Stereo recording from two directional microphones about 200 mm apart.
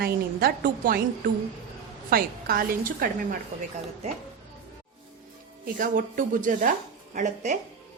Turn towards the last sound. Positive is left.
turn(degrees=-35)  # may be behind; listen again after turning